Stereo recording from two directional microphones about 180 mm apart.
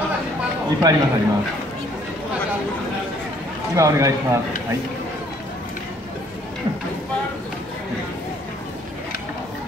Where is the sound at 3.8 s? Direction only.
15° right (ahead or behind).